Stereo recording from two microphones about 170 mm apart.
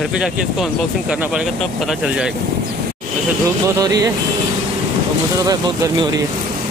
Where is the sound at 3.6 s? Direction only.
20° right (ahead or behind).